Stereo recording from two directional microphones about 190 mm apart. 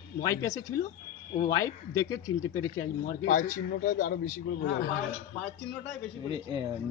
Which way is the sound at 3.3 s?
45° left (ahead or behind).